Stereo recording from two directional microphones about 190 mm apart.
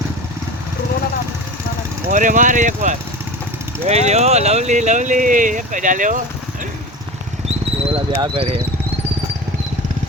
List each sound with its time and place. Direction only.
2.0 s speech: 40° right (ahead or behind)
7.9 s speech: 30° right (ahead or behind)